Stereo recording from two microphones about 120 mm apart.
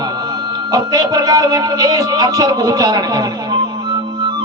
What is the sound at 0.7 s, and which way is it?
Speech, 30° right (ahead or behind).